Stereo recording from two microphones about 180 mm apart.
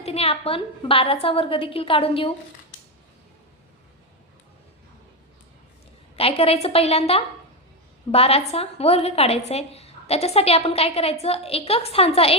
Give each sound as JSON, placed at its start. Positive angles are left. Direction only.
{"t": 0.0, "sound": "a woman's voice", "side_deg": 35}
{"t": 6.1, "sound": "a woman's voice", "side_deg": 30}